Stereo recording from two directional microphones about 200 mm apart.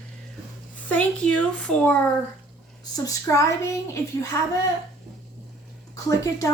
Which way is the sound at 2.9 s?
20° left (ahead or behind).